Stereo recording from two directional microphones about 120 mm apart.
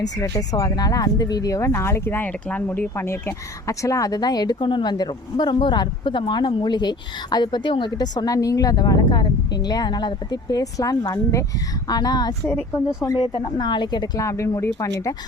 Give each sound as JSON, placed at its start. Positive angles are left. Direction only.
{"t": 0.0, "sound": "speech", "side_deg": 30}
{"t": 13.6, "sound": "speech", "side_deg": 40}
{"t": 14.2, "sound": "speech", "side_deg": 25}